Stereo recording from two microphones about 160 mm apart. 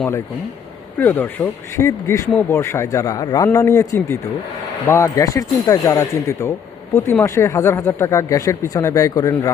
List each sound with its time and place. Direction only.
0.9 s speech: 10° left (ahead or behind)